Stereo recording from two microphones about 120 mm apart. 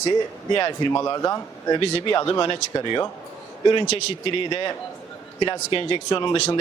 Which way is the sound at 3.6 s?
45° left (ahead or behind).